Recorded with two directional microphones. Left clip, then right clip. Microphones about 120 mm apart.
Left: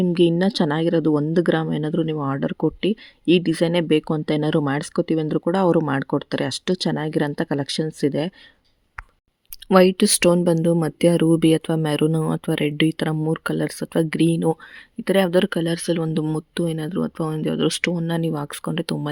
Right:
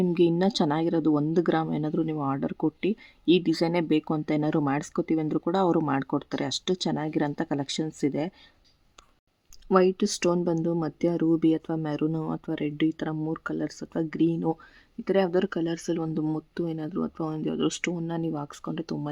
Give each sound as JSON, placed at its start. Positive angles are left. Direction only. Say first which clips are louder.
{"t": 0.0, "sound": "speech", "louder": "left 5 dB", "side_deg": 20}
{"t": 9.6, "sound": "speech", "louder": "left 7 dB", "side_deg": 45}